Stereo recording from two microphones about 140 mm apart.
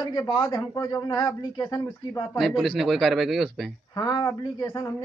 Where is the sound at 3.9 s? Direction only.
30° left (ahead or behind).